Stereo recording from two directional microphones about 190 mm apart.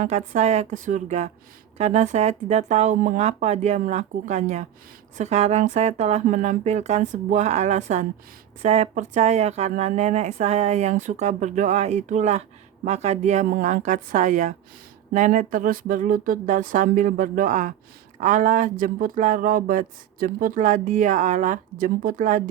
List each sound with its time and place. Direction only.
0.0 s speech: 35° right (ahead or behind)